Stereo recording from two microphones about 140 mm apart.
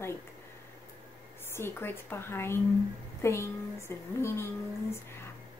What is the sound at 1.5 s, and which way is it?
A woman's voice, 15° left (ahead or behind).